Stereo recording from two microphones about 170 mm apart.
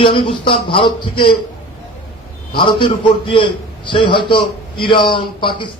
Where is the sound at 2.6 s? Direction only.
30° left (ahead or behind).